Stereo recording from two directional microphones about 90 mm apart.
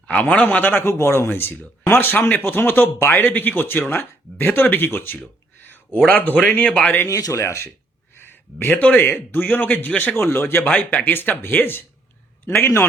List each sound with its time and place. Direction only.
0.1 s speech: 15° left (ahead or behind)
5.6 s a sound: 20° left (ahead or behind)
6.1 s speech: 20° left (ahead or behind)
7.1 s speech: 40° left (ahead or behind)
7.4 s speech: 30° left (ahead or behind)